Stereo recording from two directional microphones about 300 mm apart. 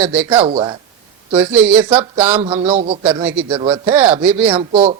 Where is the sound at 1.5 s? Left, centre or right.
Centre.